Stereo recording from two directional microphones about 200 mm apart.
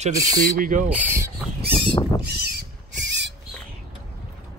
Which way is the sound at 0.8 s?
10° right (ahead or behind).